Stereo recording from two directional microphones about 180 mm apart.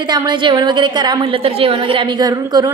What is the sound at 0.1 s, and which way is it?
A woman's voice, 25° right (ahead or behind).